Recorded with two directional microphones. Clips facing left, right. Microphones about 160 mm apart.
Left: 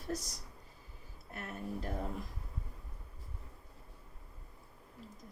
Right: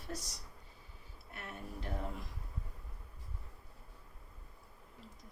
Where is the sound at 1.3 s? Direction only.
40° left (ahead or behind).